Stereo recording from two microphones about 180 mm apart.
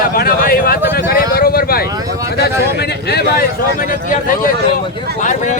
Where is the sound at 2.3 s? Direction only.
65° left (ahead or behind).